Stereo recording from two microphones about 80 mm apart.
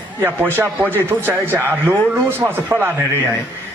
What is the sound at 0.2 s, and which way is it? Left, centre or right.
A man's voice, right.